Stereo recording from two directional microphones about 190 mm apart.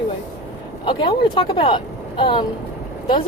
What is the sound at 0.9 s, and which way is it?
Speech, 25° left (ahead or behind).